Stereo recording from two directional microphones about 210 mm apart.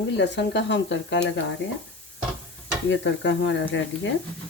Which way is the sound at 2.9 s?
60° left (ahead or behind).